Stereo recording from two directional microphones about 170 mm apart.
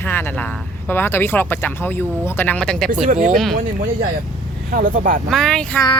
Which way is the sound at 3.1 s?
50° right (ahead or behind).